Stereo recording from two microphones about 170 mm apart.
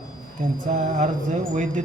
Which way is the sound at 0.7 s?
40° right (ahead or behind).